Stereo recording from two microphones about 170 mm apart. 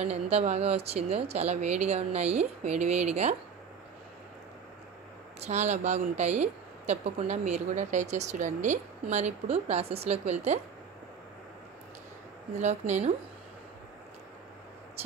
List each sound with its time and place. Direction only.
0.0 s speech: 40° right (ahead or behind)
5.4 s speech: 40° right (ahead or behind)
12.5 s speech: 45° right (ahead or behind)